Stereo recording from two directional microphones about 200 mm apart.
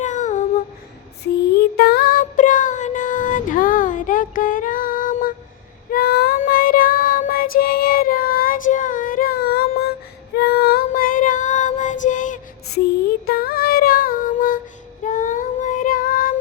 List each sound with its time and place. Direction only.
0.0 s a sound: 40° left (ahead or behind)
1.7 s music: 50° left (ahead or behind)
5.9 s child singing: 50° left (ahead or behind)